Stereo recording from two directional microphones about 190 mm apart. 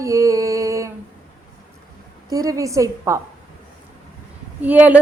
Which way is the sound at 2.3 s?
15° right (ahead or behind).